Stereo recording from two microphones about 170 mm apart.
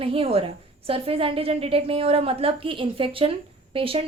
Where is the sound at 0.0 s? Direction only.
35° right (ahead or behind).